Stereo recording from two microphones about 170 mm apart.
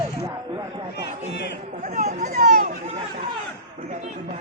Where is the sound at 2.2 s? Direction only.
60° right (ahead or behind).